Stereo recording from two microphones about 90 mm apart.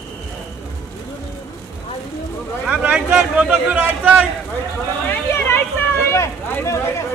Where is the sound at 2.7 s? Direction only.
15° right (ahead or behind).